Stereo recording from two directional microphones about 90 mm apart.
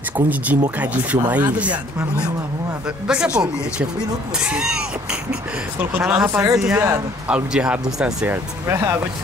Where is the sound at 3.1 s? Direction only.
10° right (ahead or behind).